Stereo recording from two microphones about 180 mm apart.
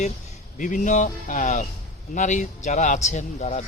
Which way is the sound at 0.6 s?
45° left (ahead or behind).